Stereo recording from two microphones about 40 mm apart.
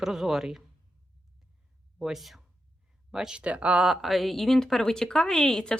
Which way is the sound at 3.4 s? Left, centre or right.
Right.